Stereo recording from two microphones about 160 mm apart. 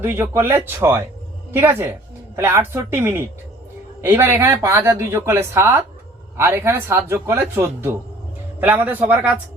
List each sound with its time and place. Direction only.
0.0 s speech: 15° right (ahead or behind)